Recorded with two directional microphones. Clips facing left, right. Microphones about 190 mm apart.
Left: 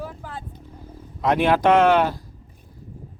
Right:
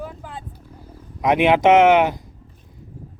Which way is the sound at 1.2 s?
15° right (ahead or behind).